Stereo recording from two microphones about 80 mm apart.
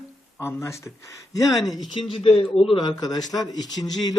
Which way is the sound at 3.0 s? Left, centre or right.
Left.